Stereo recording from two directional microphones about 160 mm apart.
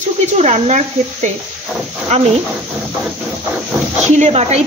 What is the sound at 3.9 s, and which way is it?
Speech, 45° right (ahead or behind).